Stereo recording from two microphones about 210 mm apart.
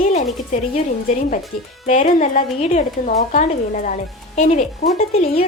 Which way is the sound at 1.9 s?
35° left (ahead or behind).